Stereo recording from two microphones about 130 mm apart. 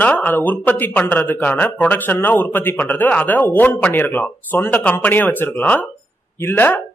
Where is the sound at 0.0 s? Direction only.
10° left (ahead or behind).